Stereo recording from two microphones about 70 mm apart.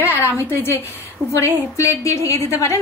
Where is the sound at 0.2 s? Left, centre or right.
Left.